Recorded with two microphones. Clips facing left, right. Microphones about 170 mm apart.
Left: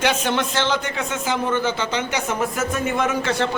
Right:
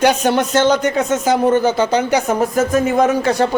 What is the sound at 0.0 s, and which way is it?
Speech, 40° right (ahead or behind).